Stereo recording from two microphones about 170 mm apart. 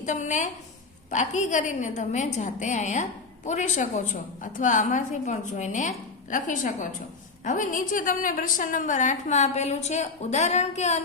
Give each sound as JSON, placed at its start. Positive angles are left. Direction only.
{"t": 0.0, "sound": "a woman's voice", "side_deg": 45}